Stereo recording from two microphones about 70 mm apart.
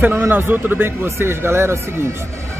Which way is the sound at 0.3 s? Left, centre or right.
Right.